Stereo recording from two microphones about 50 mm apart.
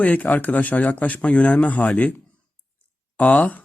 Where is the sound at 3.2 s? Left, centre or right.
Left.